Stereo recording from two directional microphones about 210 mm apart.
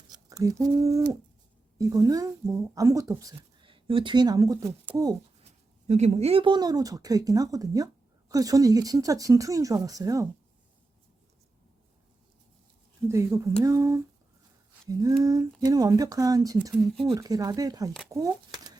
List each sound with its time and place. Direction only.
0.1 s speech: 15° right (ahead or behind)
5.9 s speech: 30° right (ahead or behind); by 10.2 s 15° right (ahead or behind)
13.1 s speech: 15° right (ahead or behind)